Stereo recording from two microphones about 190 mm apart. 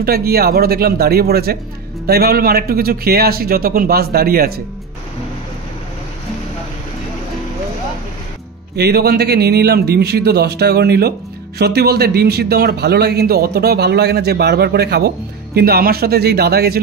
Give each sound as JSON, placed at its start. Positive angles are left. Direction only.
{"t": 0.0, "sound": "a man's voice", "side_deg": -55}
{"t": 8.7, "sound": "a man's voice", "side_deg": -55}